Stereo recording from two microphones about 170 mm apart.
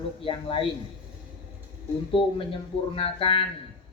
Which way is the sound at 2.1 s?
30° left (ahead or behind).